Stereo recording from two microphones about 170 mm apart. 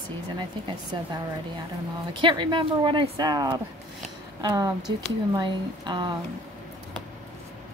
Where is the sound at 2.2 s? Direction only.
30° right (ahead or behind).